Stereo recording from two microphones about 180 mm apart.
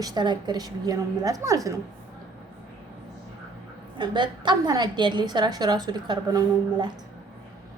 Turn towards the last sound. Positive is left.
turn(degrees=-20)  # may be behind; listen again after turning